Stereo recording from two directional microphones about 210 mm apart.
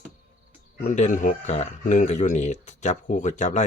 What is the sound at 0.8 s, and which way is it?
Speech, 35° left (ahead or behind).